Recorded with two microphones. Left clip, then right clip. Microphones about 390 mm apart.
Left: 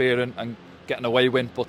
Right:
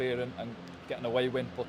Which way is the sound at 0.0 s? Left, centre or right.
Left.